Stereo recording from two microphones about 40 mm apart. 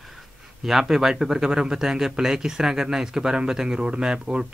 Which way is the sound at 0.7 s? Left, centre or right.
Centre.